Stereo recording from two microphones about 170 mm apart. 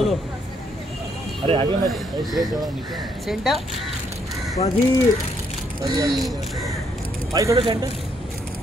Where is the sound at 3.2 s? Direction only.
Centre (ahead or behind).